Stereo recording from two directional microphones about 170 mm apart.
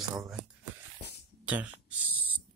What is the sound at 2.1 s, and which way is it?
Owl, 10° right (ahead or behind).